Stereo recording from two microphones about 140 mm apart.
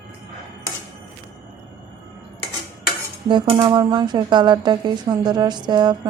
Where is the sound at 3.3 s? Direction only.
35° right (ahead or behind).